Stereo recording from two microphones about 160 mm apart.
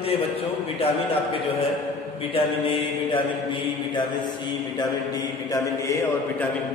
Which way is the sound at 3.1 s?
30° left (ahead or behind).